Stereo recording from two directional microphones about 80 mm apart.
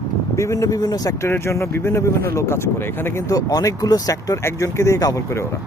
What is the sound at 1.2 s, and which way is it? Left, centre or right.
Speech, left.